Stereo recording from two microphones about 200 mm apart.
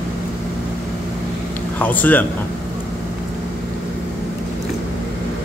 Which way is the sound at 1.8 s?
10° left (ahead or behind).